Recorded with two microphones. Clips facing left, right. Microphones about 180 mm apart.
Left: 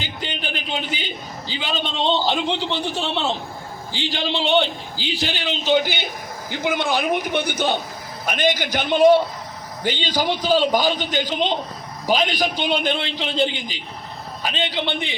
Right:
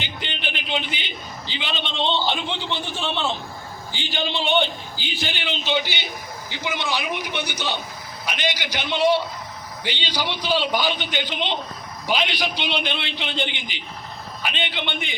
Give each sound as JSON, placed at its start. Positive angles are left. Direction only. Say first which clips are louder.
{"t": 0.0, "sound": "a man's voice", "louder": "left 2 dB", "side_deg": 40}
{"t": 4.3, "sound": "speech", "louder": "left 3 dB", "side_deg": 90}
{"t": 5.0, "sound": "a man's voice", "louder": "left 4 dB", "side_deg": 35}